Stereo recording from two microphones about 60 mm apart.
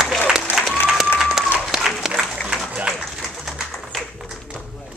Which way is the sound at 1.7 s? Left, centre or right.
Centre.